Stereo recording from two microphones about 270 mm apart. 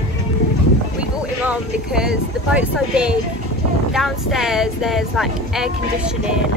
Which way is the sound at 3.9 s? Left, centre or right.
Centre.